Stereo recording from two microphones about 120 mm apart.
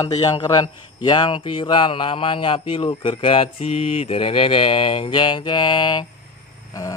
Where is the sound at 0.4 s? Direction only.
35° left (ahead or behind).